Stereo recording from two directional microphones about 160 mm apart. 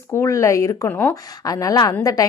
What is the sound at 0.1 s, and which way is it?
A woman's voice, 20° left (ahead or behind).